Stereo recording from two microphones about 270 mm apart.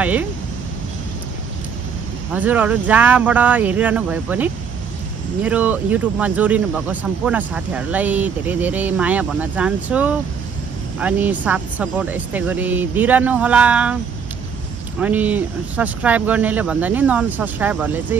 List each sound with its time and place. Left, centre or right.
0.0 s speech: centre
2.3 s speech: centre
15.0 s speech: centre